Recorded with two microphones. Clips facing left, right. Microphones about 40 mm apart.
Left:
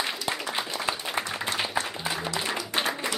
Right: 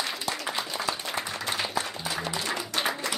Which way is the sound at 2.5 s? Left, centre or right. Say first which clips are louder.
Even; centre.